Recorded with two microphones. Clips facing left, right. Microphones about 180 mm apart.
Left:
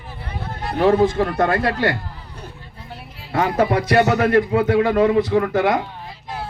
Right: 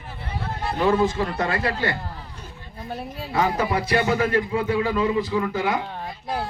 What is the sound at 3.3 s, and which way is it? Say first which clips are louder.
A man's voice: left 4 dB; 60° left (ahead or behind).